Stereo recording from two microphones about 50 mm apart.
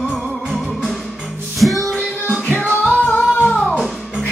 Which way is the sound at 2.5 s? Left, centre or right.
Left.